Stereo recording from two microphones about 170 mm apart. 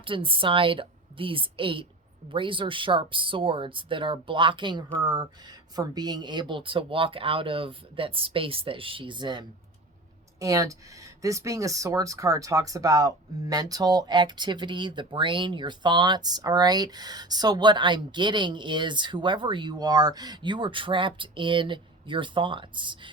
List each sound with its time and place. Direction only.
0.0 s speech: 30° right (ahead or behind)